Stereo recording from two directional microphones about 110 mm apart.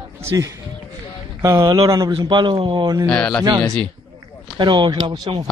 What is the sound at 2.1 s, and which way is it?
Speech, 45° right (ahead or behind).